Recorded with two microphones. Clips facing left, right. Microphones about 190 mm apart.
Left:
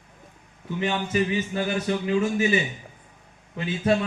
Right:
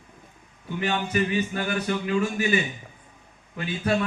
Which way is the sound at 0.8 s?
25° left (ahead or behind).